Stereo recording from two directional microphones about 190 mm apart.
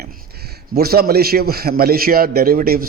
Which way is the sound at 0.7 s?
55° right (ahead or behind).